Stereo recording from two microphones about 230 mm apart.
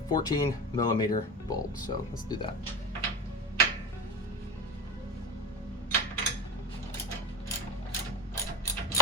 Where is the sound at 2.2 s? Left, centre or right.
Centre.